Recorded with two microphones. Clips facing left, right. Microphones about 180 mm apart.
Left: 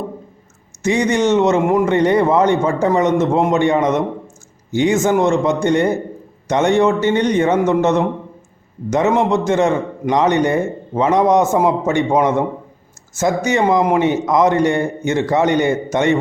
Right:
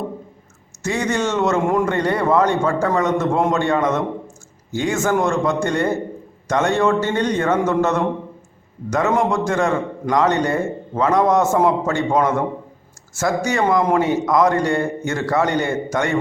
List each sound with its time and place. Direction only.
0.8 s a man's voice: 20° left (ahead or behind)